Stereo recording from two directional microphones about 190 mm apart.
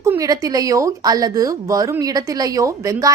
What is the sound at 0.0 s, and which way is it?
Speech, 15° right (ahead or behind).